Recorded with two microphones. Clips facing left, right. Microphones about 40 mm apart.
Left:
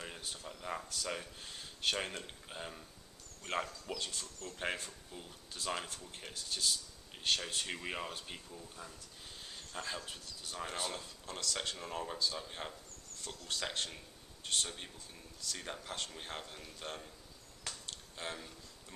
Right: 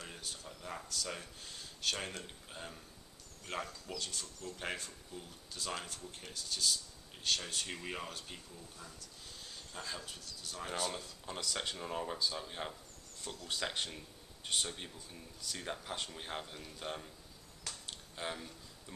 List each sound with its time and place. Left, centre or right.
0.0 s speech: centre
11.2 s speech: centre
17.8 s a sound: centre